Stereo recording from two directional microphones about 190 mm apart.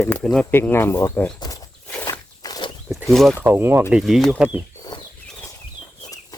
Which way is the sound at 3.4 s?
10° right (ahead or behind).